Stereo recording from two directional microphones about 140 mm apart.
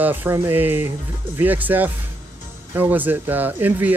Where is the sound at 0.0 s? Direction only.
15° right (ahead or behind).